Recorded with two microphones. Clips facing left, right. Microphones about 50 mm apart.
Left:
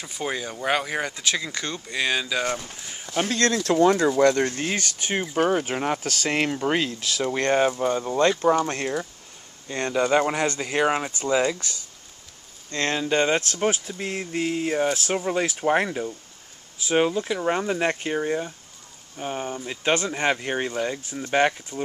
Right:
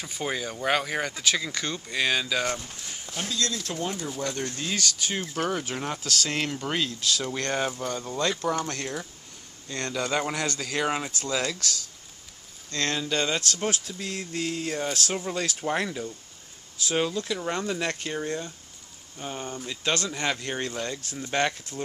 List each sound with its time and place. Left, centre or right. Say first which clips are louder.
0.0 s speech: left 1 dB; centre
3.2 s speech: left 8 dB; left
3.7 s speech: left 13 dB; left
4.1 s speech: left 12 dB; left
5.2 s speech: left 9 dB; centre
5.5 s speech: left 6 dB; left; by 21.8 s centre